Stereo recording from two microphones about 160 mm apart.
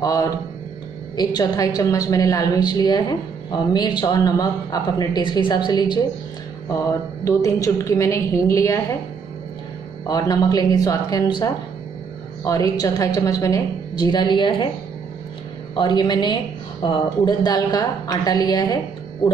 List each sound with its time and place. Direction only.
0.0 s a woman's voice: 20° left (ahead or behind)
7.2 s a woman's voice: 20° left (ahead or behind)
10.0 s a woman's voice: 25° left (ahead or behind)
15.7 s a woman's voice: 30° left (ahead or behind)